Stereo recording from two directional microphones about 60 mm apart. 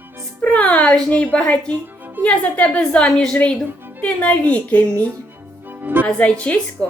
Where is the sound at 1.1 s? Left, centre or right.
Left.